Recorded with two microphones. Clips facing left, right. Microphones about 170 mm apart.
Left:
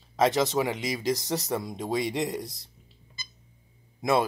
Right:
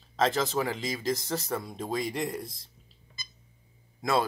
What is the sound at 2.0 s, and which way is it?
Speech, 90° left.